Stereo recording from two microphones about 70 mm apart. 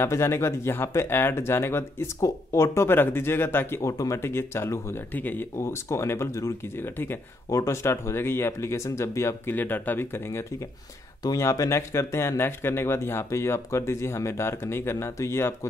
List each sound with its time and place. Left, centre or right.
0.0 s speech: left
2.1 s speech: left
3.8 s speech: left
4.2 s speech: left
5.1 s speech: left
5.6 s speech: left
6.8 s speech: left
9.6 s speech: left
11.3 s speech: left